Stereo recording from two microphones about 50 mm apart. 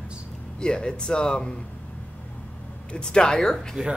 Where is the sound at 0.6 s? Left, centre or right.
Centre.